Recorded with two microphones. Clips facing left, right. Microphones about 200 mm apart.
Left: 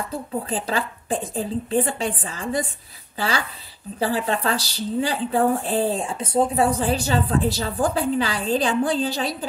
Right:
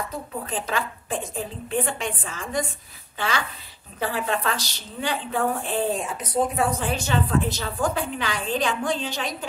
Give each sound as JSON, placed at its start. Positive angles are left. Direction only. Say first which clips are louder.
{"t": 0.1, "sound": "a woman's voice", "louder": "left 4 dB", "side_deg": 30}